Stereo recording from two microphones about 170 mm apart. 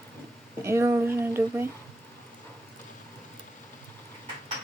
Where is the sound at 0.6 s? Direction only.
15° right (ahead or behind).